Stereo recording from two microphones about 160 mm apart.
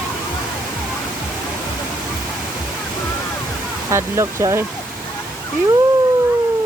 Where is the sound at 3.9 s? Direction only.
15° right (ahead or behind).